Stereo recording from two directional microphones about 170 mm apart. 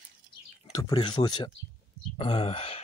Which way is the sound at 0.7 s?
25° left (ahead or behind).